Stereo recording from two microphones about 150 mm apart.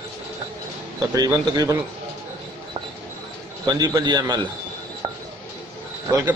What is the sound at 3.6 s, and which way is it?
Speech, 25° right (ahead or behind).